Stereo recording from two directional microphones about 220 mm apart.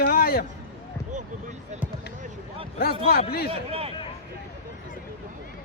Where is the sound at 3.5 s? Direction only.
25° right (ahead or behind).